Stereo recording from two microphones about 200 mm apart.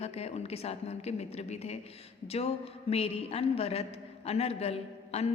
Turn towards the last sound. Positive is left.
turn(degrees=30)  # may be behind; listen again after turning